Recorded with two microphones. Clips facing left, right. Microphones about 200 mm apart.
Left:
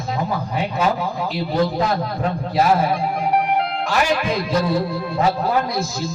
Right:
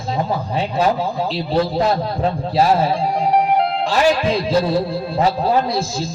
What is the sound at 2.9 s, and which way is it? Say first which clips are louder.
Music: right 3 dB; 30° right (ahead or behind).